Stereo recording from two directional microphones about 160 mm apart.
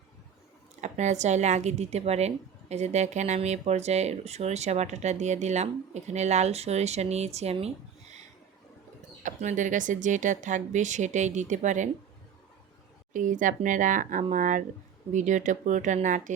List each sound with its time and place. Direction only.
0.8 s speech: 45° right (ahead or behind)
9.2 s speech: 50° right (ahead or behind)
13.1 s speech: 55° right (ahead or behind)